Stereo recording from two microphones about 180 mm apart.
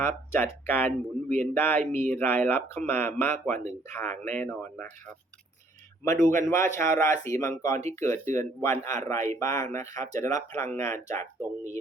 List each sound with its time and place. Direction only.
0.0 s speech: 15° left (ahead or behind)
6.1 s speech: 15° left (ahead or behind)